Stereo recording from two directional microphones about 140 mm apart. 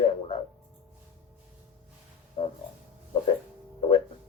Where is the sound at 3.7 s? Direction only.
45° left (ahead or behind).